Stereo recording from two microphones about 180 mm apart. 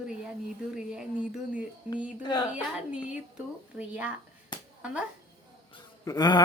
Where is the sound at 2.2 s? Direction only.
25° left (ahead or behind).